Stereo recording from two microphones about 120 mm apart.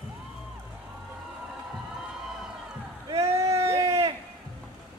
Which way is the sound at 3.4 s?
25° right (ahead or behind).